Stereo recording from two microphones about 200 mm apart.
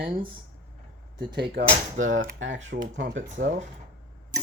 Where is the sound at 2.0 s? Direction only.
80° right.